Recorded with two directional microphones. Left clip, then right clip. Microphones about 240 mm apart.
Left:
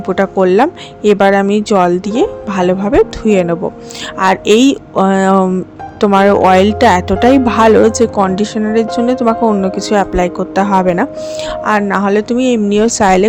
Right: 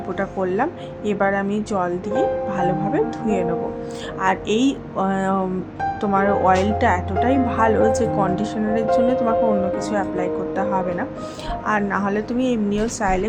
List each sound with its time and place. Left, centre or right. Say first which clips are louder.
0.2 s speech: left 12 dB; left